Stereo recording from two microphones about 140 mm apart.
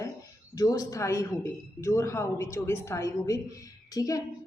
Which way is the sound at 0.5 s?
25° left (ahead or behind).